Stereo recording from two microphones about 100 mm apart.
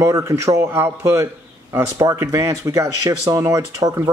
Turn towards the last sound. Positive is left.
turn(degrees=-30)  # may be behind; listen again after turning